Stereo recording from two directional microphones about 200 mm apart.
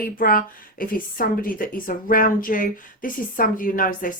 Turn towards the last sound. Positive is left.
turn(degrees=45)  # may be behind; listen again after turning